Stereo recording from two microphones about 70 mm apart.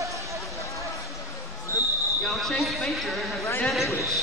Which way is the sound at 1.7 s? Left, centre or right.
Left.